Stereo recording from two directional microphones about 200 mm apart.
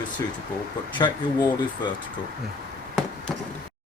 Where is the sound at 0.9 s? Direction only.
20° left (ahead or behind).